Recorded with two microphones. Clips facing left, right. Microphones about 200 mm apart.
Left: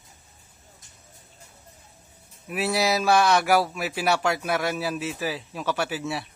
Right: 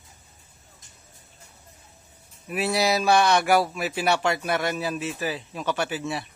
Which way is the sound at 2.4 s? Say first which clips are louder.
Right 1 dB; centre (ahead or behind).